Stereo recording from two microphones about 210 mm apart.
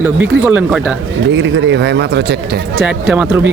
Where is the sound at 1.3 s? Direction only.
60° right (ahead or behind).